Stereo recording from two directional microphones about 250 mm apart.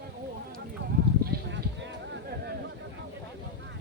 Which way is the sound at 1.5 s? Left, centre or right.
Right.